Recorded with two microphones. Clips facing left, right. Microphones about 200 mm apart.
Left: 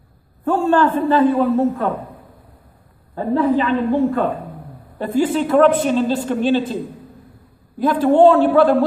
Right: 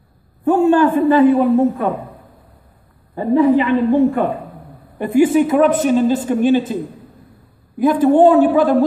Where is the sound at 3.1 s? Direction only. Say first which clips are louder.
Right 4 dB; 15° right (ahead or behind).